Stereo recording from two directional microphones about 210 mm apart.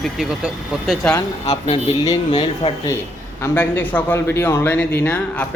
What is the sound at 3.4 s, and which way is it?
Speech, 10° left (ahead or behind).